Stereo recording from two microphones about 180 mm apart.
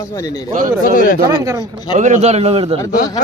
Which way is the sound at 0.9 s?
50° left (ahead or behind).